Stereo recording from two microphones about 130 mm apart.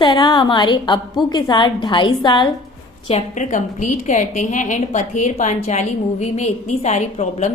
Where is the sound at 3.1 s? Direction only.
60° left (ahead or behind).